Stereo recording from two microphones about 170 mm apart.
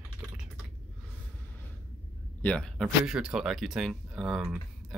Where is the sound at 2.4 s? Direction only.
5° left (ahead or behind).